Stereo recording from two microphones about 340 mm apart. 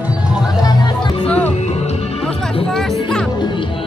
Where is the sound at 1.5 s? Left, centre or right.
Centre.